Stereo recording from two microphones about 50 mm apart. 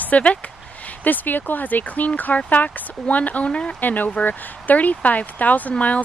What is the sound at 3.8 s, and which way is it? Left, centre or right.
Speech, left.